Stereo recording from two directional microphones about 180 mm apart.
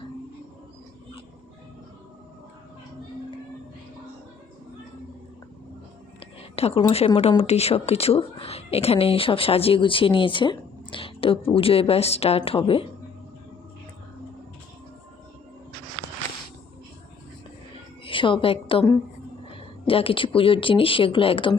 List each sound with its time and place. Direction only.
6.6 s speech: 30° left (ahead or behind)
18.0 s a woman's voice: 30° left (ahead or behind)